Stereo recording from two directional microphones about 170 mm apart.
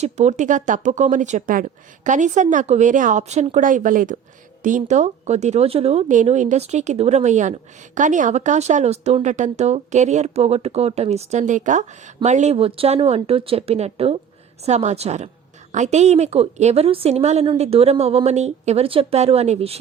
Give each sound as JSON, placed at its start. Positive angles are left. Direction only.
{"t": 0.0, "sound": "a woman's voice", "side_deg": -40}